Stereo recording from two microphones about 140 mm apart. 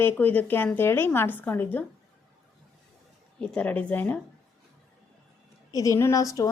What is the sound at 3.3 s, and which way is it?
Speech, 10° left (ahead or behind).